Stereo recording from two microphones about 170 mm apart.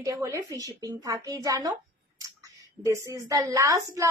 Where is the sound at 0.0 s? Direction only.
20° right (ahead or behind).